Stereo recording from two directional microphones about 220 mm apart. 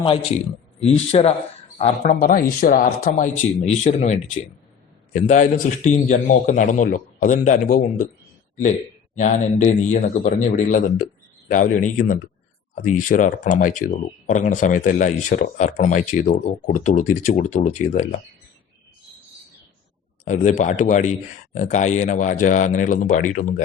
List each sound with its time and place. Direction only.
0.8 s a man's voice: 30° left (ahead or behind)
9.1 s speech: 35° left (ahead or behind)
20.2 s speech: 35° left (ahead or behind)